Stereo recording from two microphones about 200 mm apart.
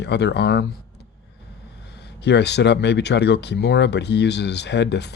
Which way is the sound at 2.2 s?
60° left (ahead or behind).